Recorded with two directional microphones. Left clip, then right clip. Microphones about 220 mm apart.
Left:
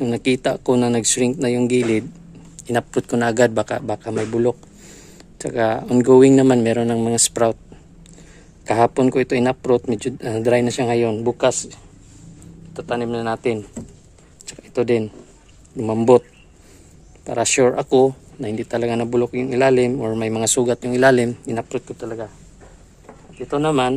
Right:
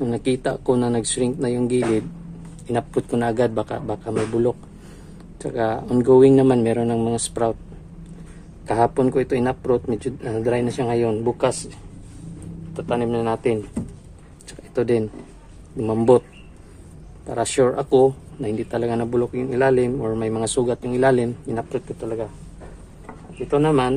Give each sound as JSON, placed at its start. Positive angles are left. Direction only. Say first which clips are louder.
{"t": 0.0, "sound": "speech", "louder": "left 3 dB", "side_deg": 45}
{"t": 8.6, "sound": "speech", "louder": "left 3 dB", "side_deg": 45}
{"t": 12.7, "sound": "speech", "louder": "right 1 dB", "side_deg": 40}
{"t": 14.4, "sound": "a sound", "louder": "left 2 dB", "side_deg": 40}
{"t": 15.8, "sound": "speech", "louder": "left 2 dB", "side_deg": 40}
{"t": 17.3, "sound": "speech", "louder": "left 3 dB", "side_deg": 45}
{"t": 23.5, "sound": "speech", "louder": "even", "side_deg": 35}